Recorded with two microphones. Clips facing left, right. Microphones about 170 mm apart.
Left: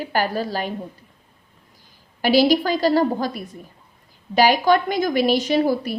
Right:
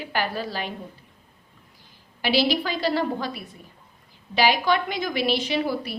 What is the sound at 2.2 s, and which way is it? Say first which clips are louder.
A woman's voice: left 6 dB; 45° left (ahead or behind).